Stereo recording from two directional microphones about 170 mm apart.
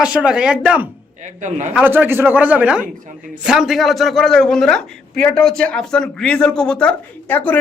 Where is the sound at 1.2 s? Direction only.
45° right (ahead or behind).